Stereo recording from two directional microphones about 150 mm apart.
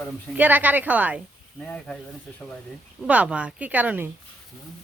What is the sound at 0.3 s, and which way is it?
Speech, 10° right (ahead or behind).